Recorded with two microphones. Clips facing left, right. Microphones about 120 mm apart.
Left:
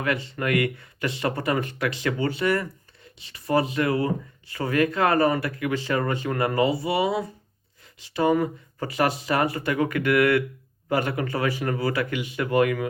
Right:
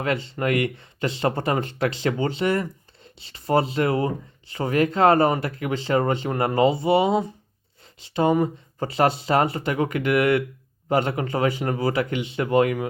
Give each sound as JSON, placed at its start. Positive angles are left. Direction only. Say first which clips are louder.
{"t": 0.0, "sound": "speech", "louder": "right 2 dB", "side_deg": -25}